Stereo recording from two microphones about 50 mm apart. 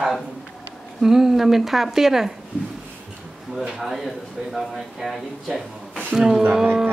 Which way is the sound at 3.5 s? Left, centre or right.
Centre.